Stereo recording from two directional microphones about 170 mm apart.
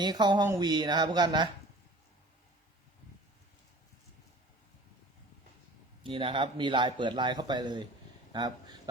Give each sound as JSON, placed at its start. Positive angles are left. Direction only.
{"t": 0.0, "sound": "speech", "side_deg": -25}
{"t": 6.0, "sound": "speech", "side_deg": -30}